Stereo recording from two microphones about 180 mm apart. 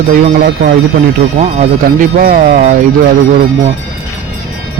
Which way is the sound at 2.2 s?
45° right (ahead or behind).